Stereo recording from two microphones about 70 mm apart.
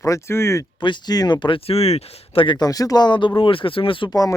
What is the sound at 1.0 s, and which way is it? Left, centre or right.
Speech, left.